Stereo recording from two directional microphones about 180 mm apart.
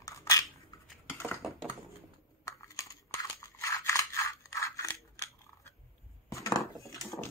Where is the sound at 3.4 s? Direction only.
15° left (ahead or behind).